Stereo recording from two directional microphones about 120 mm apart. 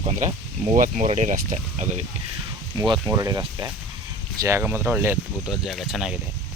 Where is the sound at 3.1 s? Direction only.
30° right (ahead or behind).